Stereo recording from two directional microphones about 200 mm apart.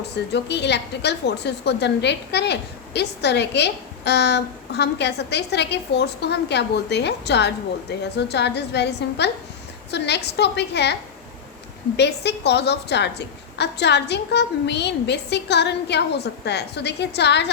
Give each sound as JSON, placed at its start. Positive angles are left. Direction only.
{"t": 0.3, "sound": "a woman's voice", "side_deg": 55}
{"t": 11.9, "sound": "a woman's voice", "side_deg": 55}